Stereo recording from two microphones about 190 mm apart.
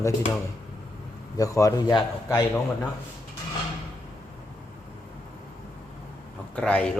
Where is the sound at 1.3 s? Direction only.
20° left (ahead or behind).